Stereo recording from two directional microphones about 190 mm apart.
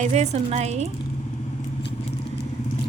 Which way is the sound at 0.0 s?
35° right (ahead or behind).